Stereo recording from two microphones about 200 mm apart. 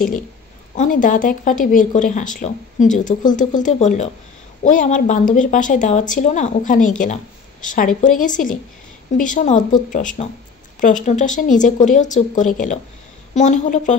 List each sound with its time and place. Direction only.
0.7 s speech: 40° left (ahead or behind)
7.6 s speech: 40° left (ahead or behind)